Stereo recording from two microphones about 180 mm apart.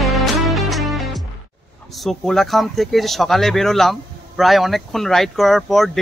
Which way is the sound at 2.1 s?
Centre (ahead or behind).